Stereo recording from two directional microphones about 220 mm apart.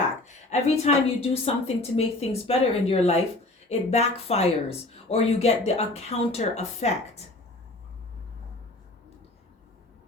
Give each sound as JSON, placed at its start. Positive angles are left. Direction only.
{"t": 0.3, "sound": "speech", "side_deg": 30}